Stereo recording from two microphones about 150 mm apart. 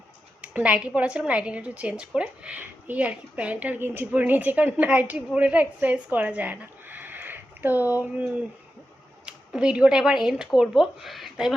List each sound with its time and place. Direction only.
0.4 s a woman's voice: 10° right (ahead or behind)